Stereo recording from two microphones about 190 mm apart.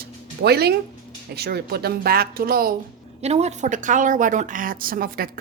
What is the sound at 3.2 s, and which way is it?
A woman's voice, 35° right (ahead or behind).